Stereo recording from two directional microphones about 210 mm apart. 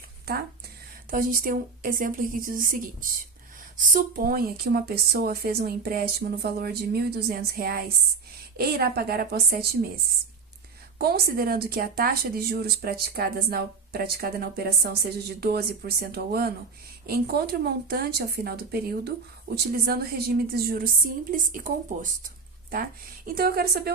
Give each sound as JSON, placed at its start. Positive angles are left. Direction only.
{"t": 0.3, "sound": "a woman's voice", "side_deg": -45}